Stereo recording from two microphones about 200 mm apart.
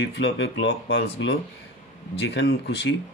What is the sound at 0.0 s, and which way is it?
Speech, 60° left (ahead or behind).